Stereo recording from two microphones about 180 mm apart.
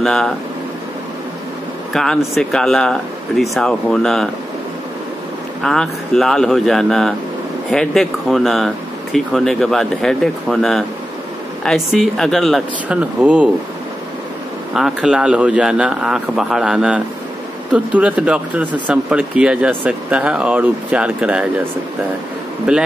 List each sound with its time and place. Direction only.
0.0 s speech: 5° left (ahead or behind)
2.0 s speech: centre (ahead or behind)
5.6 s speech: centre (ahead or behind)
14.7 s speech: centre (ahead or behind)
22.7 s speech: 5° right (ahead or behind)